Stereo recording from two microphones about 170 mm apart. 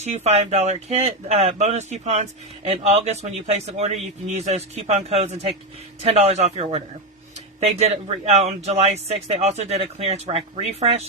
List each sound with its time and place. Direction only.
0.0 s speech: 40° right (ahead or behind)